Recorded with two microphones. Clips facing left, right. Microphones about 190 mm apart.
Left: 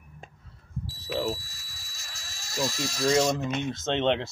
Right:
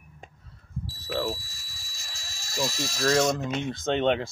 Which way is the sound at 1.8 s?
90° right.